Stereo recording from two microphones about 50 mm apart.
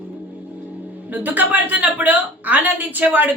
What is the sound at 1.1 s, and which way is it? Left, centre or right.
A woman's voice, right.